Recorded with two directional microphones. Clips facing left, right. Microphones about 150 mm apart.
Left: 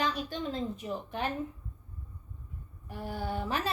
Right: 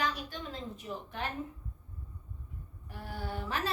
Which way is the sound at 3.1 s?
15° left (ahead or behind).